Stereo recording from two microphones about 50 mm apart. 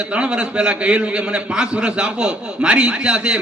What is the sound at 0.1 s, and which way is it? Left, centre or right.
A man's voice, centre.